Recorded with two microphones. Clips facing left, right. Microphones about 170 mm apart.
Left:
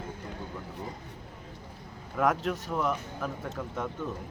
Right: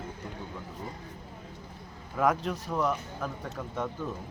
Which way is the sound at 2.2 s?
Centre (ahead or behind).